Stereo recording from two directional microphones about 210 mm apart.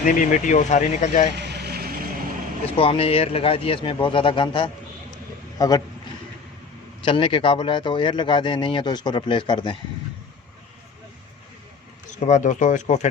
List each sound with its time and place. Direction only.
0.0 s speech: 35° left (ahead or behind)
1.4 s vehicle: 55° right (ahead or behind)
2.7 s a man's voice: 25° left (ahead or behind)
7.0 s a man's voice: 25° left (ahead or behind)
12.2 s speech: 35° left (ahead or behind)